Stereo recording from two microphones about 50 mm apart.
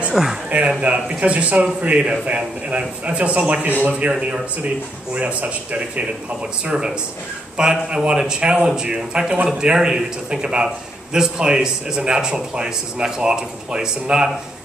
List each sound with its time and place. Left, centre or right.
0.1 s speech: centre
0.5 s a man's voice: right
6.6 s speech: centre